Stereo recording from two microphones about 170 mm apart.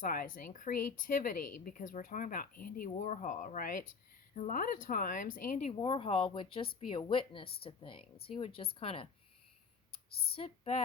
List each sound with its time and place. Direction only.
0.0 s speech: 55° left (ahead or behind)
5.8 s speech: 30° left (ahead or behind)
10.3 s a woman's voice: 35° left (ahead or behind)